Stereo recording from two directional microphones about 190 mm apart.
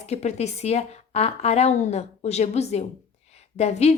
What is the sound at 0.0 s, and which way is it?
A woman's voice, 35° left (ahead or behind).